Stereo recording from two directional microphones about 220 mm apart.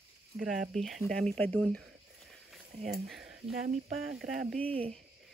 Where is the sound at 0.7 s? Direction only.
Centre (ahead or behind).